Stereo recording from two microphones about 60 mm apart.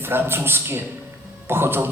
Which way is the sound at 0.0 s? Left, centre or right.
Right.